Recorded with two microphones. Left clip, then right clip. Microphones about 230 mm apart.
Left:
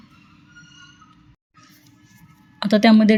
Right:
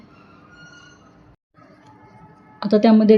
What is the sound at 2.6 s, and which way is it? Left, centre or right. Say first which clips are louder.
Speech: right 1 dB; left.